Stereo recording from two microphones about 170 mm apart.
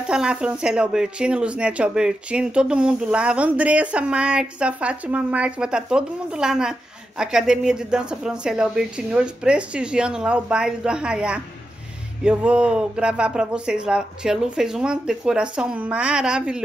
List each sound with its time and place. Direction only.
0.0 s speech: 5° right (ahead or behind)